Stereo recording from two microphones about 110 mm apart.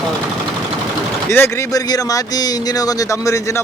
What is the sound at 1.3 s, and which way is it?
Speech, 25° left (ahead or behind).